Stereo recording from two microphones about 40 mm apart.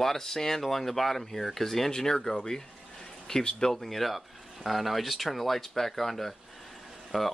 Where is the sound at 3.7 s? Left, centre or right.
Centre.